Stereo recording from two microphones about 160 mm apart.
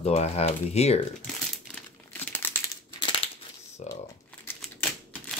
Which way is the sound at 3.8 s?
45° left (ahead or behind).